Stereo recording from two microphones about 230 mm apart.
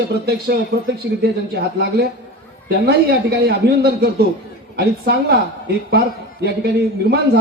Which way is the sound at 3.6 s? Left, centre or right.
Right.